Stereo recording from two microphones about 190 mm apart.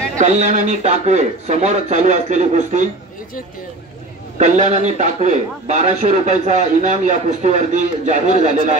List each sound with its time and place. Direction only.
0.2 s a man's voice: 40° right (ahead or behind)
4.4 s a man's voice: 40° right (ahead or behind)